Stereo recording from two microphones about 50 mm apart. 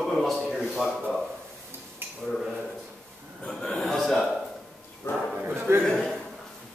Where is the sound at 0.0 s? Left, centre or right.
Centre.